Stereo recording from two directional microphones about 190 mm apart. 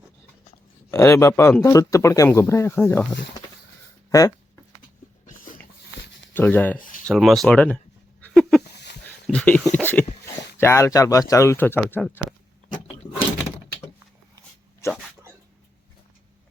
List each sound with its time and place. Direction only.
0.9 s speech: 15° left (ahead or behind)
6.3 s speech: 10° left (ahead or behind)
8.3 s dog: centre (ahead or behind)
9.2 s speech: 5° left (ahead or behind)
13.0 s door: 20° left (ahead or behind)